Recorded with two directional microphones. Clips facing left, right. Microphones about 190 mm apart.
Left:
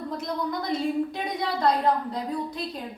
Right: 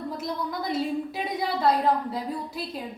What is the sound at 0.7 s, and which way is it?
A woman's voice, 5° right (ahead or behind).